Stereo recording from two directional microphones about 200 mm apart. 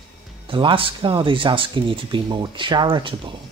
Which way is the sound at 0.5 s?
25° right (ahead or behind).